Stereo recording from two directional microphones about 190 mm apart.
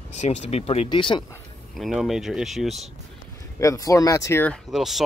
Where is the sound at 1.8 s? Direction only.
Centre (ahead or behind).